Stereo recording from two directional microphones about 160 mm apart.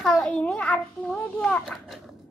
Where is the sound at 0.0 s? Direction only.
Centre (ahead or behind).